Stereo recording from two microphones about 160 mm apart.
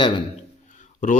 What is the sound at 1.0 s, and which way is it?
Speech, 55° left (ahead or behind).